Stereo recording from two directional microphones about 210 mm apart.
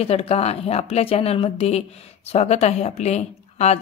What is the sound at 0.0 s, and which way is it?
Speech, 30° left (ahead or behind).